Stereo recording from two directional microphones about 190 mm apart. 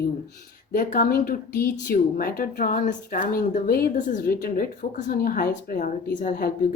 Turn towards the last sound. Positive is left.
turn(degrees=45)  # may be behind; listen again after turning